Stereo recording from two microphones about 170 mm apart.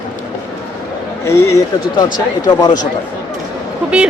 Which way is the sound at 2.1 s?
25° left (ahead or behind).